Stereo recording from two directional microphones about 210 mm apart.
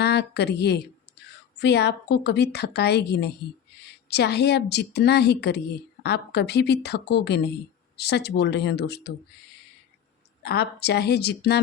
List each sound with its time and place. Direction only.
0.0 s a woman's voice: 50° left (ahead or behind)
10.4 s a woman's voice: 50° left (ahead or behind)